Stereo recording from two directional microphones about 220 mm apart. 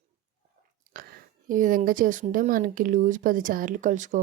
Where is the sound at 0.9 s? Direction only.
40° right (ahead or behind).